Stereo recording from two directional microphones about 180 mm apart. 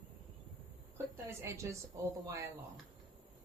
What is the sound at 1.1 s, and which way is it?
Speech, 15° right (ahead or behind).